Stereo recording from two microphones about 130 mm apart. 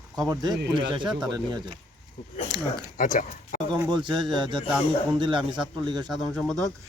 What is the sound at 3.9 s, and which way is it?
Speech, 35° right (ahead or behind).